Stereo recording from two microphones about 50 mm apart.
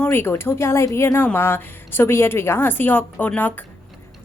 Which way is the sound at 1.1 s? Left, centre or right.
Left.